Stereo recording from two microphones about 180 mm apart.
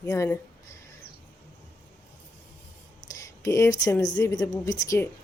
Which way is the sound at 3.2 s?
15° left (ahead or behind).